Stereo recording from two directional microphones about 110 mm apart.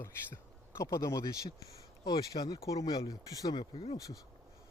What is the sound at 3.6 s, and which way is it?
Speech, 50° left (ahead or behind).